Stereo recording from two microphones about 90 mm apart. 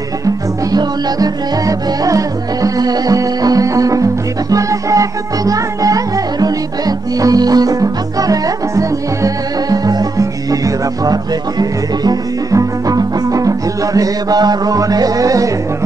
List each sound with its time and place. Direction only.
0.2 s music: 45° right (ahead or behind)